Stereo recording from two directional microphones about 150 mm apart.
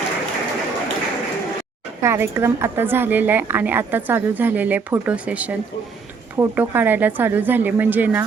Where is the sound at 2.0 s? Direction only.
15° right (ahead or behind).